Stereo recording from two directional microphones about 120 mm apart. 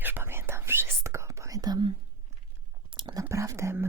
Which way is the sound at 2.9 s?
40° right (ahead or behind).